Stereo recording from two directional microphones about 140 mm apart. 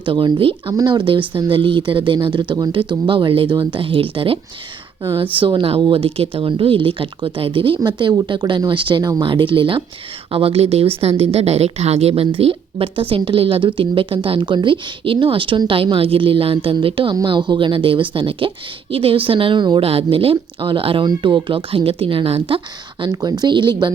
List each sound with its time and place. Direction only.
0.0 s a woman's voice: 35° right (ahead or behind)